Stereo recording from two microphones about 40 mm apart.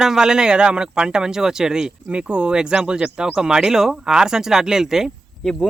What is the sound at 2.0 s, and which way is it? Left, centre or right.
Speech, right.